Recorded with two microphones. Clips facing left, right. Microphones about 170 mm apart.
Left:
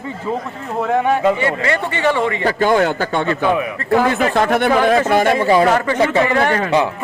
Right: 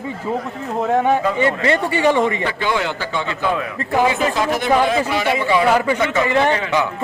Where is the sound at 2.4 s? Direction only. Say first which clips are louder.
Left 6 dB; 45° left (ahead or behind).